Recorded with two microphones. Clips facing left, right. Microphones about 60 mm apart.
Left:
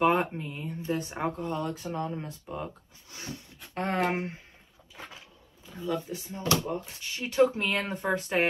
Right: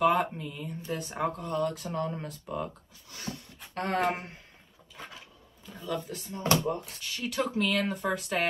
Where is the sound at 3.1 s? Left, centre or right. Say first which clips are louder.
Right 1 dB; left.